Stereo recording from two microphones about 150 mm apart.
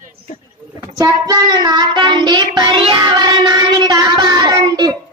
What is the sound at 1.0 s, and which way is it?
Child singing, 25° right (ahead or behind).